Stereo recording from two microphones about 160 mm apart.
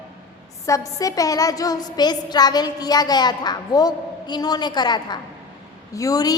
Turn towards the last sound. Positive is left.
turn(degrees=25)  # may be behind; listen again after turning